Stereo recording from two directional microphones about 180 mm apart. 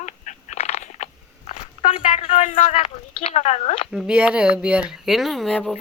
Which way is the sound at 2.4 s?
45° left (ahead or behind).